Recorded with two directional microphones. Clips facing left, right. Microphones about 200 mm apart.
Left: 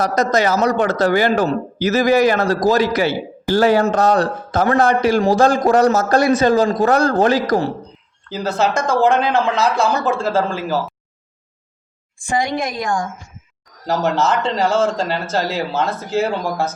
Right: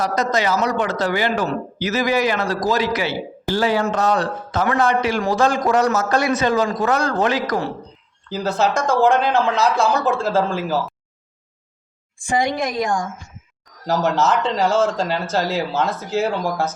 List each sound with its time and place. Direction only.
0.0 s speech: 40° left (ahead or behind)
8.3 s speech: centre (ahead or behind)
13.8 s speech: centre (ahead or behind)